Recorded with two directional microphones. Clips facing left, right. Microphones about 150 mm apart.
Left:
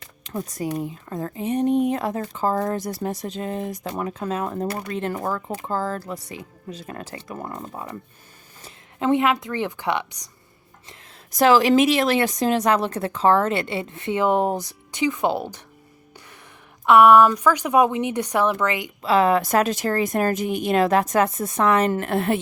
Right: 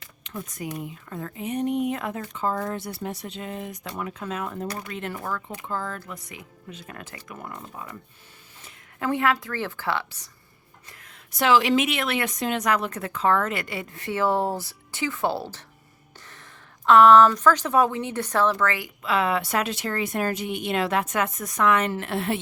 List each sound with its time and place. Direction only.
0.0 s a woman's voice: 40° left (ahead or behind)
9.0 s a woman's voice: 20° left (ahead or behind)
11.3 s a woman's voice: 40° left (ahead or behind); by 15.6 s 15° left (ahead or behind)
16.8 s speech: 10° left (ahead or behind)
19.0 s a woman's voice: 35° left (ahead or behind)
21.9 s a woman's voice: 50° left (ahead or behind)